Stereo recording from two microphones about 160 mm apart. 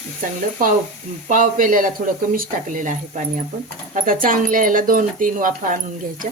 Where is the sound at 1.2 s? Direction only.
55° right (ahead or behind).